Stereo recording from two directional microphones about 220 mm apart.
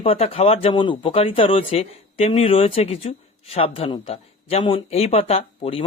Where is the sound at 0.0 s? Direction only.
25° left (ahead or behind).